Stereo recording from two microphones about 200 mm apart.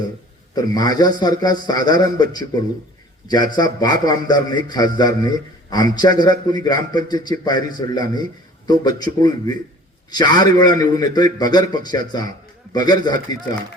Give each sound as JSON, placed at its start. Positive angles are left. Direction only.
{"t": 0.5, "sound": "a man's voice", "side_deg": 20}